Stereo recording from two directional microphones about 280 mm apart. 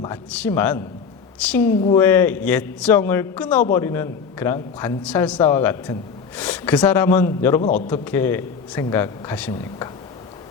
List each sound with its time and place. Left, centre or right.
0.0 s a man's voice: centre
7.6 s a man's voice: left
7.9 s a man's voice: centre